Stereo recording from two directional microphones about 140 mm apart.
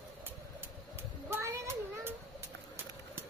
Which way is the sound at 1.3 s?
20° right (ahead or behind).